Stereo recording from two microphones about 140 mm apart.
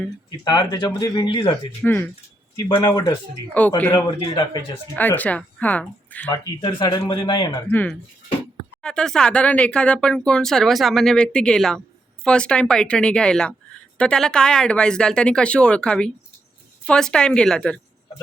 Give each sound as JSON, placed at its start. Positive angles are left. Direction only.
{"t": 0.3, "sound": "speech", "side_deg": 30}
{"t": 1.8, "sound": "speech", "side_deg": 15}
{"t": 2.6, "sound": "speech", "side_deg": 30}
{"t": 3.8, "sound": "speech", "side_deg": 15}
{"t": 6.6, "sound": "speech", "side_deg": 35}
{"t": 7.7, "sound": "speech", "side_deg": 10}